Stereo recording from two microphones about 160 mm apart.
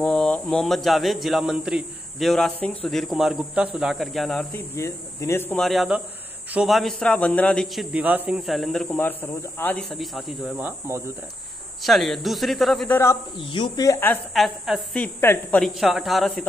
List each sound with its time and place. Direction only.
0.0 s speech: 5° left (ahead or behind)
4.6 s speech: 20° left (ahead or behind)
5.6 s speech: centre (ahead or behind)
8.8 s speech: 10° left (ahead or behind); by 11.0 s 10° right (ahead or behind)
11.8 s speech: centre (ahead or behind)
12.9 s speech: 15° left (ahead or behind)
13.4 s speech: 30° left (ahead or behind); by 14.2 s 15° left (ahead or behind)
14.3 s speech: centre (ahead or behind)
15.1 s speech: 15° left (ahead or behind)
15.6 s speech: centre (ahead or behind)